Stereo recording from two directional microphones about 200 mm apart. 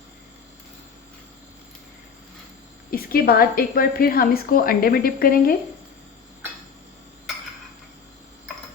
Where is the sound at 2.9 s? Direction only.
45° left (ahead or behind).